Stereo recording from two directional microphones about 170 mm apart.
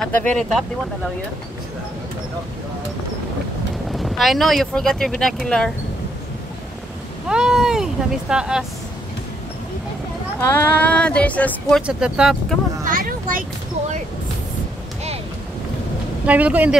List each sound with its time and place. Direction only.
0.1 s speech: 10° left (ahead or behind)
3.9 s speech: centre (ahead or behind)
7.2 s speech: 5° right (ahead or behind)
10.5 s speech: 10° left (ahead or behind)
11.8 s speech: 5° right (ahead or behind)
12.8 s a sound: 55° right (ahead or behind)
16.3 s a man's voice: 10° right (ahead or behind)